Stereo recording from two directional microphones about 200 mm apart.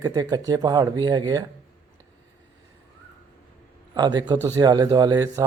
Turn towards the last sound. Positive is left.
turn(degrees=-15)  # may be behind; listen again after turning